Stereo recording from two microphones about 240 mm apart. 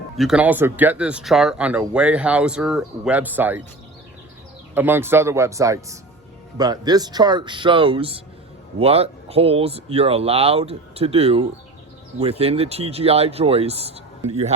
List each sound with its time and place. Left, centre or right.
0.2 s speech: centre
4.7 s speech: centre; by 14.5 s right